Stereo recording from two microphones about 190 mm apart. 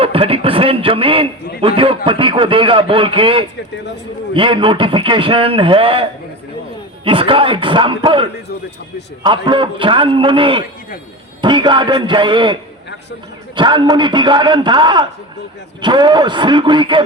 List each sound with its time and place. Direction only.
0.0 s a man's voice: 30° right (ahead or behind)
13.6 s a man's voice: 25° right (ahead or behind)